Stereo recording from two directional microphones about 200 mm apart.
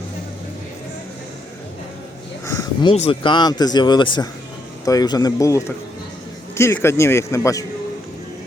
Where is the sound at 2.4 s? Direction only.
15° left (ahead or behind).